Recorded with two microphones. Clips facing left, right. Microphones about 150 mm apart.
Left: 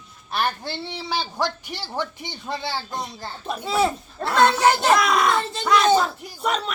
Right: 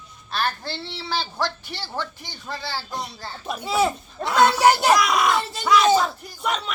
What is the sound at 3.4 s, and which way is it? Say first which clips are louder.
Speech: even; 5° right (ahead or behind).